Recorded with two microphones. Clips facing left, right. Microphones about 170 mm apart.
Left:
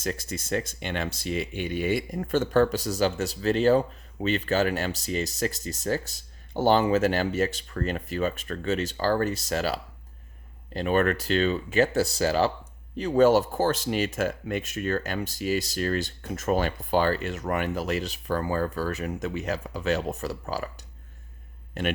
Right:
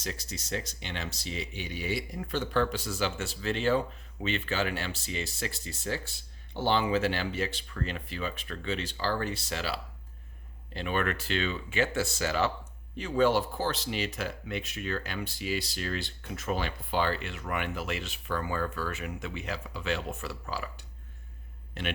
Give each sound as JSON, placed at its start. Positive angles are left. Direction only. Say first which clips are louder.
{"t": 0.0, "sound": "speech", "louder": "left 7 dB", "side_deg": 50}